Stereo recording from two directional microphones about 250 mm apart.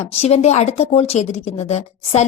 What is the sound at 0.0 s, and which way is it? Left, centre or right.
A woman's voice, left.